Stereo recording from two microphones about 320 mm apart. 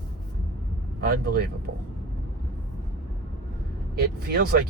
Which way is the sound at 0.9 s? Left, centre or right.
Right.